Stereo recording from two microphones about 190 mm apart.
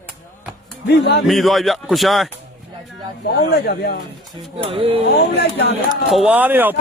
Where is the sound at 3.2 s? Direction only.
60° left (ahead or behind).